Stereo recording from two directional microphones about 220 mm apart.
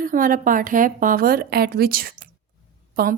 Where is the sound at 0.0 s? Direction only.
40° right (ahead or behind).